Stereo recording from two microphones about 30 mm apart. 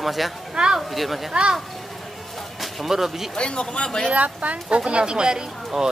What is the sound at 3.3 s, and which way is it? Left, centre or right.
Speech, left.